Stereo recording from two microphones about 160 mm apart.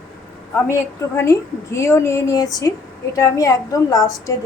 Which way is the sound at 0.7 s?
15° left (ahead or behind).